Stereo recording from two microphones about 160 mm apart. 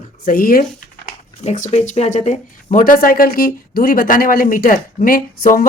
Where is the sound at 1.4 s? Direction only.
45° left (ahead or behind).